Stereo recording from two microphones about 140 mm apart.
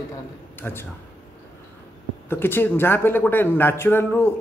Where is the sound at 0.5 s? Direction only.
15° left (ahead or behind).